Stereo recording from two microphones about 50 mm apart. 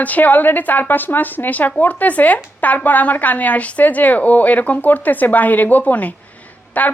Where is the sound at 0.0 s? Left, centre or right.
Left.